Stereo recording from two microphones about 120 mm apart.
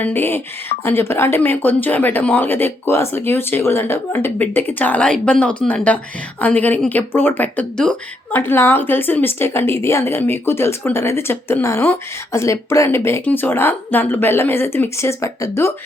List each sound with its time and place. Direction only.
0.0 s a woman's voice: 15° left (ahead or behind)